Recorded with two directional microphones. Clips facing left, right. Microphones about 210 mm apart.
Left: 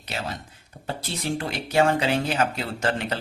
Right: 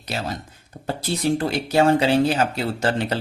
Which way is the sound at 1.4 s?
35° right (ahead or behind).